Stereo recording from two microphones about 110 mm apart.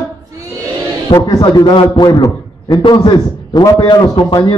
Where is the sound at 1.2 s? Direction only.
45° left (ahead or behind).